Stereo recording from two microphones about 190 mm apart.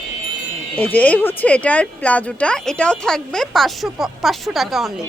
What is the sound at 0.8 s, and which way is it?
Speech, 10° left (ahead or behind).